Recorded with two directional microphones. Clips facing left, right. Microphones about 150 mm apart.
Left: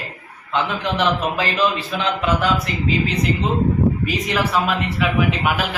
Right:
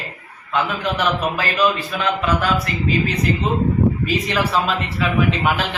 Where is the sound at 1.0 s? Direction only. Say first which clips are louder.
Left 2 dB; 25° left (ahead or behind).